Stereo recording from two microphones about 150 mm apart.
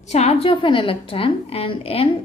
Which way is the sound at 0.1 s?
45° left (ahead or behind).